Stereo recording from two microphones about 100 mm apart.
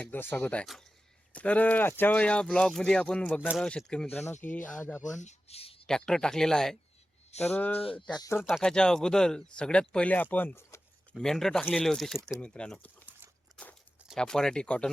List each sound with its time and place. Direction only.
0.0 s speech: 20° left (ahead or behind)
4.0 s speech: 25° left (ahead or behind)
5.5 s speech: 85° left
5.8 s speech: 5° left (ahead or behind)
7.5 s speech: 20° left (ahead or behind)
8.4 s speech: 5° right (ahead or behind); by 10.8 s 25° left (ahead or behind)
11.2 s speech: 5° left (ahead or behind)
12.4 s speech: 10° left (ahead or behind)
14.2 s speech: 5° left (ahead or behind)